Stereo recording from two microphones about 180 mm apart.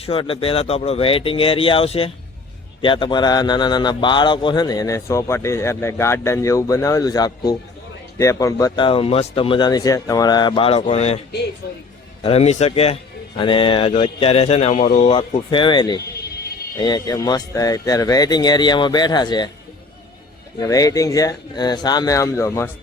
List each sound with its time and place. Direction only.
0.0 s speech: 30° left (ahead or behind)
12.2 s speech: 35° left (ahead or behind)
15.0 s speech: 30° left (ahead or behind)
20.6 s speech: 20° left (ahead or behind)